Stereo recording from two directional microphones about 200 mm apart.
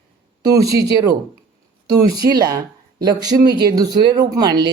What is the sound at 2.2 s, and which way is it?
Speech, 50° right (ahead or behind).